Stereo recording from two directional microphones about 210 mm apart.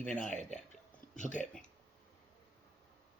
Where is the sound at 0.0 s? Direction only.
5° left (ahead or behind).